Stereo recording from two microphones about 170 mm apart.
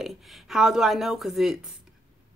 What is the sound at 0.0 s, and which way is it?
Speech, centre (ahead or behind).